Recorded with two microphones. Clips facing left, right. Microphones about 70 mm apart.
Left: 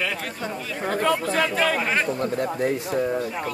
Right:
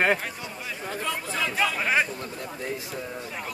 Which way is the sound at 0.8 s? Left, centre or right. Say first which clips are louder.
Left 10 dB; left.